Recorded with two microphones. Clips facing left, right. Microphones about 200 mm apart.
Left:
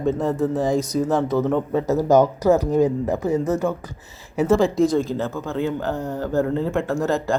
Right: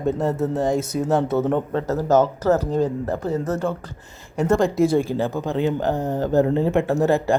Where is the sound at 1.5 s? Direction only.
10° left (ahead or behind).